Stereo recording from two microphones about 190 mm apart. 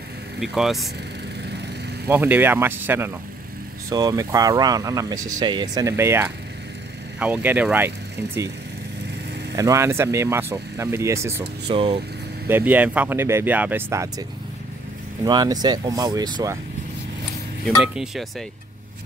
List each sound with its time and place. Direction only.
0.4 s speech: centre (ahead or behind)
2.0 s speech: 10° right (ahead or behind)
9.6 s speech: 15° right (ahead or behind)
11.7 s speech: 30° right (ahead or behind)
12.4 s speech: 10° right (ahead or behind)
15.2 s speech: 20° right (ahead or behind)
17.7 s speech: 5° right (ahead or behind)